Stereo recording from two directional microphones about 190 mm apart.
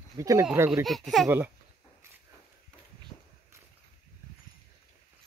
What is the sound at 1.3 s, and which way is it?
Speech, 10° right (ahead or behind).